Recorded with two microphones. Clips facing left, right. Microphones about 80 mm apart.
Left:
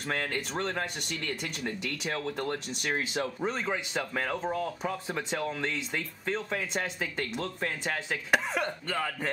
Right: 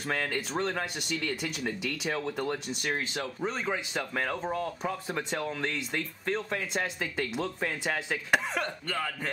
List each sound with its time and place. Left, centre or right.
0.0 s speech: centre
8.6 s speech: centre